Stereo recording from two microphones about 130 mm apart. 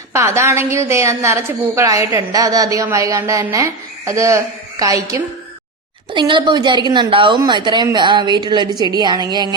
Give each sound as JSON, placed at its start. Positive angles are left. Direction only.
{"t": 0.1, "sound": "a woman's voice", "side_deg": -20}
{"t": 6.1, "sound": "a woman's voice", "side_deg": -40}